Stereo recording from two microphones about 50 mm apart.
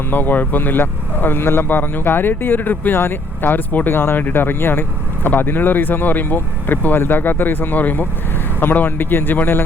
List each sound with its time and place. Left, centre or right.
0.1 s speech: left